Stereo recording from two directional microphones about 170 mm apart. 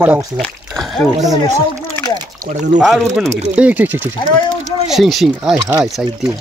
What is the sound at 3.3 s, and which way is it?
Speech, 40° right (ahead or behind).